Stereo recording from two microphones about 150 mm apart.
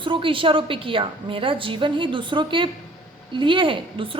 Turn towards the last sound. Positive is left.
turn(degrees=-35)  # may be behind; listen again after turning